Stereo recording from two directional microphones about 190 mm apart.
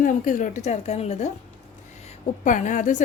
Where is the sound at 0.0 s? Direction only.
45° left (ahead or behind).